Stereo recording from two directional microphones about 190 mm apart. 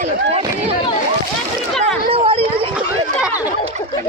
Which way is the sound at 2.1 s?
30° right (ahead or behind).